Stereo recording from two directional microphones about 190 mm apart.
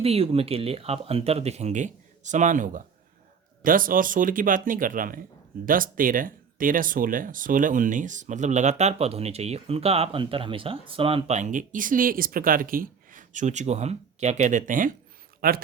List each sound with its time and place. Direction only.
0.0 s speech: 30° right (ahead or behind); by 15.6 s 50° right (ahead or behind)